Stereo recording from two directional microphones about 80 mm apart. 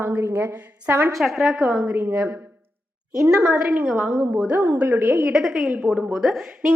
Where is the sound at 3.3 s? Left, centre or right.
Centre.